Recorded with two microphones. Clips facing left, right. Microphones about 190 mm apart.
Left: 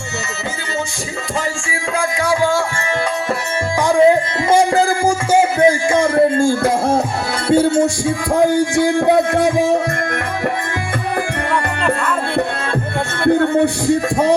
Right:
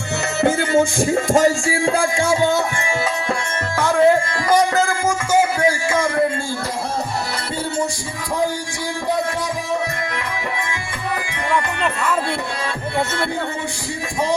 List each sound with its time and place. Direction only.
0.4 s music: 50° right (ahead or behind); by 2.5 s 35° right (ahead or behind)
3.8 s music: 15° left (ahead or behind)
4.5 s music: 30° left (ahead or behind)
5.5 s a sound: 25° left (ahead or behind)
6.3 s a sound: 50° left (ahead or behind)
7.5 s music: 50° left (ahead or behind)
8.4 s a man's voice: 55° left (ahead or behind)
13.2 s a man's voice: 55° left (ahead or behind)